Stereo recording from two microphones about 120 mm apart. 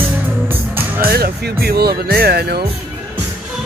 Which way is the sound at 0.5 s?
15° right (ahead or behind).